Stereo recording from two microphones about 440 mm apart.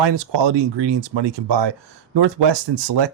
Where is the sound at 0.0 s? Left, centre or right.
Right.